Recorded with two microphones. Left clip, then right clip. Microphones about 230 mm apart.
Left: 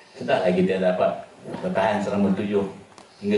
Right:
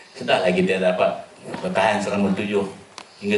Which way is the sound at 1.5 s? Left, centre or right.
Centre.